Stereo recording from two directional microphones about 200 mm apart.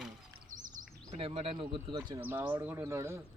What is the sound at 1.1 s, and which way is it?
Speech, 30° right (ahead or behind).